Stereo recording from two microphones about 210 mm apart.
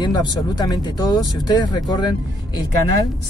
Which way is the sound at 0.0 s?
20° left (ahead or behind).